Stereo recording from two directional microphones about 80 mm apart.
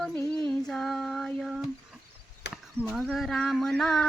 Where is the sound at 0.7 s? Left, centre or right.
Centre.